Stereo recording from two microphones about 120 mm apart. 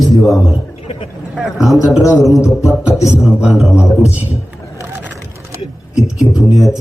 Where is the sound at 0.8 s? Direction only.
55° left (ahead or behind).